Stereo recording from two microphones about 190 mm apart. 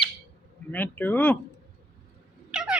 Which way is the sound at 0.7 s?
10° left (ahead or behind).